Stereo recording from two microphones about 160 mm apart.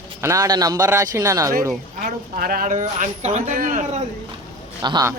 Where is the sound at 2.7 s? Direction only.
50° right (ahead or behind).